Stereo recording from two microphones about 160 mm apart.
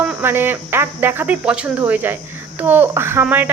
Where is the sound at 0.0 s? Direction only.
15° right (ahead or behind).